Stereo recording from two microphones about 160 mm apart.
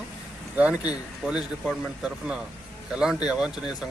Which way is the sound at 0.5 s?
10° right (ahead or behind).